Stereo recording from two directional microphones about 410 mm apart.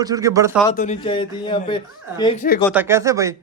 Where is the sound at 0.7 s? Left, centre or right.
Centre.